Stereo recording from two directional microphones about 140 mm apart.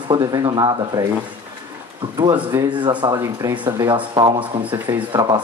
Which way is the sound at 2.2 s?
25° right (ahead or behind).